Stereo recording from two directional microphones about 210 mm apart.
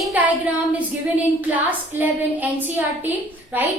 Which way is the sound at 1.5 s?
10° right (ahead or behind).